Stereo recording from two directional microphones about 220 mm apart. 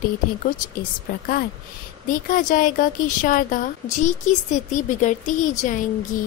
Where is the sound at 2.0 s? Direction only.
40° left (ahead or behind).